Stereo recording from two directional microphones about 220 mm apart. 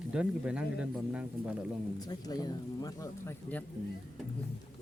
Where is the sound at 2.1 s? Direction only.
15° left (ahead or behind).